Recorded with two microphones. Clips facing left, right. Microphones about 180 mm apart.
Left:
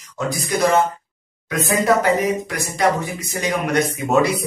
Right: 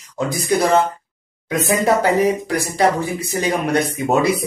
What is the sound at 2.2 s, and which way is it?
Speech, 35° right (ahead or behind).